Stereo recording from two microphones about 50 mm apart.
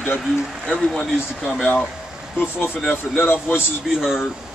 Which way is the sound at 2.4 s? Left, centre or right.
Left.